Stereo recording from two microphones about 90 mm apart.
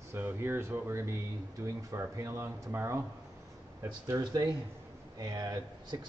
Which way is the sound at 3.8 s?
45° right (ahead or behind).